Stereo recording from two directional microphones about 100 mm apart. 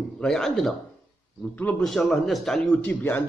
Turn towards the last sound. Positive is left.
turn(degrees=15)  # may be behind; listen again after turning